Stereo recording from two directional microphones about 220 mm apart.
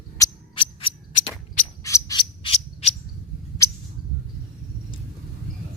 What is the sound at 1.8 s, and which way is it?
Bird, 15° left (ahead or behind).